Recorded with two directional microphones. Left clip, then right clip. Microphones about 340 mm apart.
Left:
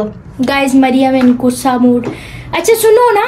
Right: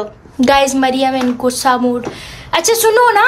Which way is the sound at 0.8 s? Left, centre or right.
Centre.